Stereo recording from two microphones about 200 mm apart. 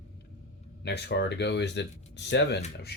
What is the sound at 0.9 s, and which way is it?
Speech, 60° left (ahead or behind).